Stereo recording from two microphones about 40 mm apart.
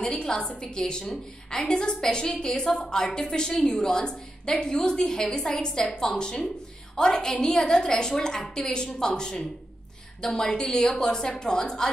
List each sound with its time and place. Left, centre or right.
0.0 s a woman's voice: centre